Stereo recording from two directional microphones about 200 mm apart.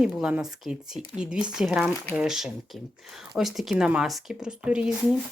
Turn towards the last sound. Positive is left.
turn(degrees=-5)  # may be behind; listen again after turning